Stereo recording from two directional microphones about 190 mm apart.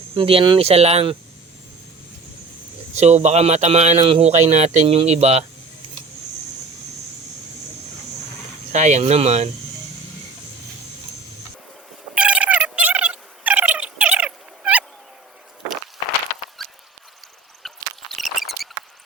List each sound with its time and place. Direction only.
0.2 s speech: 30° right (ahead or behind)
2.9 s a man's voice: 35° right (ahead or behind)
8.7 s a man's voice: 40° right (ahead or behind)
12.1 s a sound: 5° right (ahead or behind)
16.6 s rodents: centre (ahead or behind)
17.6 s a sound: centre (ahead or behind)